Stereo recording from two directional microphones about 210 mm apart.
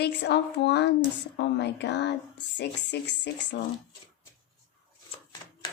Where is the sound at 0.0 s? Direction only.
55° left (ahead or behind).